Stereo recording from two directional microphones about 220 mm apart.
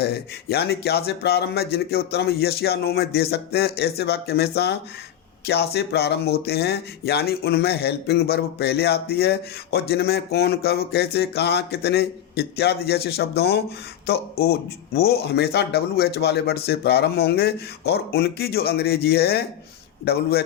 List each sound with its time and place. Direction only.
0.0 s speech: 45° left (ahead or behind)